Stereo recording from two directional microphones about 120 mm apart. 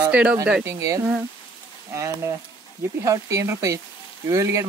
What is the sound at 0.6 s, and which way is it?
Speech, 25° right (ahead or behind).